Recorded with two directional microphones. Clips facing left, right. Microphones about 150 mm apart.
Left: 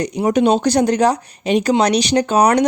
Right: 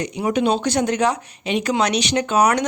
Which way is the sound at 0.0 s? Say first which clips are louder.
Left 5 dB; 40° left (ahead or behind).